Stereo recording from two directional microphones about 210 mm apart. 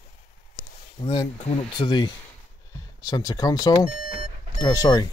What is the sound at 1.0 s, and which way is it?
Speech, 25° left (ahead or behind).